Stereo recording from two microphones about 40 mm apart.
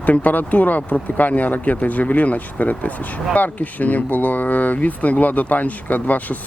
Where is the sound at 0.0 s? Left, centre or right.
Left.